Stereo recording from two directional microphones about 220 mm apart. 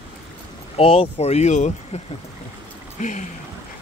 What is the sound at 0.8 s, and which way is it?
Speech, 25° left (ahead or behind).